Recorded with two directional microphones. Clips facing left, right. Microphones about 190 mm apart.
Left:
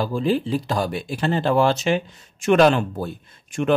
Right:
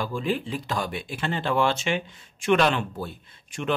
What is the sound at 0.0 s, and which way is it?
Speech, 35° left (ahead or behind).